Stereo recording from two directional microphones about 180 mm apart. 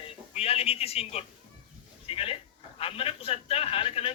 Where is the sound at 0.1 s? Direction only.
35° left (ahead or behind).